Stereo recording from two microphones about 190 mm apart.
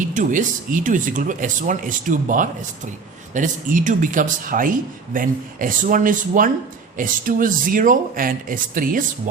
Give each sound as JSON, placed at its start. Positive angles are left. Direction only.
{"t": 0.0, "sound": "speech", "side_deg": -45}